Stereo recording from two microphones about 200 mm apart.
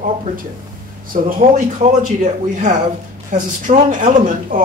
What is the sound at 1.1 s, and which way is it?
Speech, 40° right (ahead or behind).